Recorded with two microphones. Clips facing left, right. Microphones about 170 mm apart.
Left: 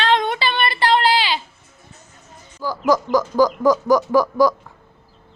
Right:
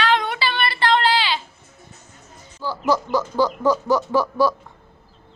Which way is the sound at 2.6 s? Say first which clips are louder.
Left 3 dB; 10° left (ahead or behind).